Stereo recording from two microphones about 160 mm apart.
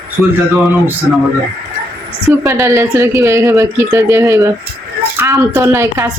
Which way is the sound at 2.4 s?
20° right (ahead or behind).